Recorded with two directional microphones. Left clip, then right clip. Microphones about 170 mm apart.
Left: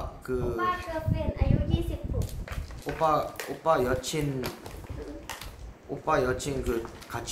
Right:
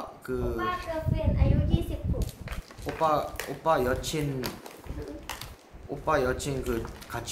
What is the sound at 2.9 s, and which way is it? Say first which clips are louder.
Speech: even; 15° right (ahead or behind).